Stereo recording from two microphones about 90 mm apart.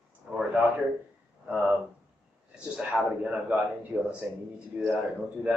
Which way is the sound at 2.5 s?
10° right (ahead or behind).